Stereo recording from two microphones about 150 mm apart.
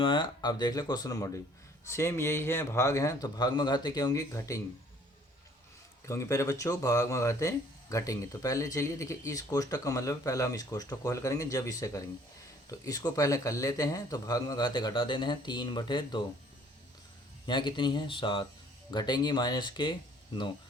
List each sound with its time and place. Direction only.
0.0 s speech: 30° left (ahead or behind)
6.1 s speech: 20° left (ahead or behind)
17.4 s speech: 30° left (ahead or behind)